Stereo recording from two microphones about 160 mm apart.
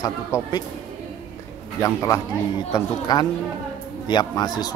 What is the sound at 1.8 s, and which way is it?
Speech, 15° left (ahead or behind).